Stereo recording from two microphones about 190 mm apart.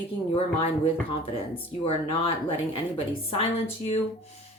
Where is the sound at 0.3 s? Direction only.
30° left (ahead or behind).